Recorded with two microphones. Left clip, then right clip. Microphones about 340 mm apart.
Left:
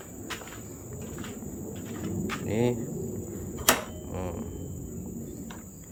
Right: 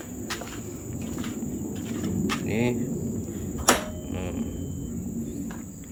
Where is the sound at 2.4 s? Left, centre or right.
Centre.